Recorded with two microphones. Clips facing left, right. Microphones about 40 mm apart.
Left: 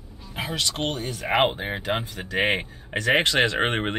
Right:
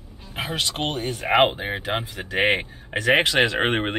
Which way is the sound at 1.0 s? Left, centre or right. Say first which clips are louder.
Right 3 dB; right.